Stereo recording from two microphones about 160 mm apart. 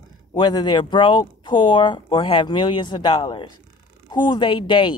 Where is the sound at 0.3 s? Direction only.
25° left (ahead or behind).